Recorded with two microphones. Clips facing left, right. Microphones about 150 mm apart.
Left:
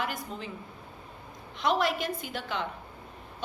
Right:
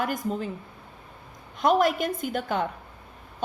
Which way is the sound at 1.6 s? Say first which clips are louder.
Right 6 dB; 50° right (ahead or behind).